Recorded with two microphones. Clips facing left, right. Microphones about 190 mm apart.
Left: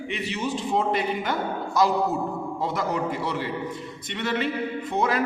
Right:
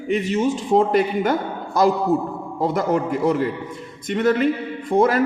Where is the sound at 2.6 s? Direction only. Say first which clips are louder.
Right 7 dB; 50° right (ahead or behind).